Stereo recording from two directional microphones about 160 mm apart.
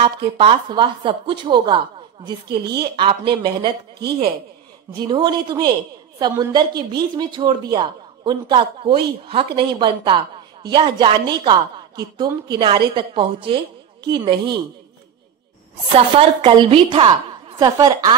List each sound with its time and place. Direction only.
0.0 s a woman's voice: 35° right (ahead or behind)
2.8 s a woman's voice: 30° right (ahead or behind)
4.9 s a woman's voice: 25° right (ahead or behind)
15.9 s a woman's voice: 35° right (ahead or behind)